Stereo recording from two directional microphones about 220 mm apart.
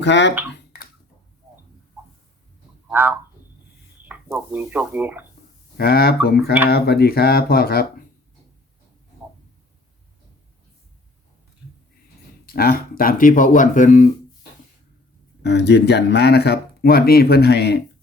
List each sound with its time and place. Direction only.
0.0 s speech: 55° left (ahead or behind)
2.9 s speech: 10° right (ahead or behind)
5.7 s speech: 45° left (ahead or behind)
12.5 s speech: 45° left (ahead or behind)
15.4 s speech: 50° left (ahead or behind)